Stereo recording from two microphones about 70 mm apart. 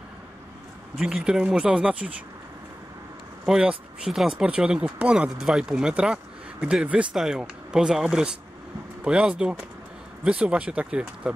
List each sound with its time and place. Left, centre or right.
1.0 s speech: centre
3.4 s speech: centre
7.2 s speech: centre